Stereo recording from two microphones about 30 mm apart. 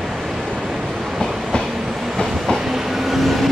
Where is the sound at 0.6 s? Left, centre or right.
Centre.